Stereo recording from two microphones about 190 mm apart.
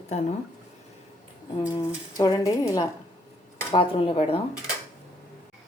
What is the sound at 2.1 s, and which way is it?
A woman's voice, 20° left (ahead or behind).